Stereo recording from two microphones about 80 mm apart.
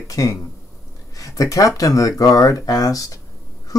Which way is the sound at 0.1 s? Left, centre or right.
Left.